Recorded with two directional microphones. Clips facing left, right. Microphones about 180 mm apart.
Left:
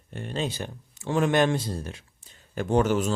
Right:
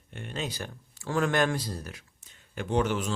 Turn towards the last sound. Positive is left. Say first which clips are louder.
# left 5 dB
turn(degrees=45)  # may be behind; listen again after turning